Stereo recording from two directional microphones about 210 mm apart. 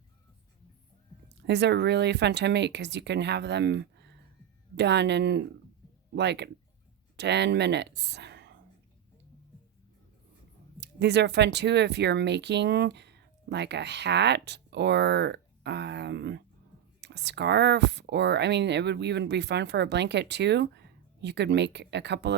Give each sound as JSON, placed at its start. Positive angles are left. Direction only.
{"t": 1.4, "sound": "speech", "side_deg": -55}
{"t": 10.8, "sound": "speech", "side_deg": -55}